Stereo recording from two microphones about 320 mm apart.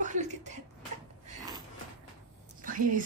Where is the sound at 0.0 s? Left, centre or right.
Right.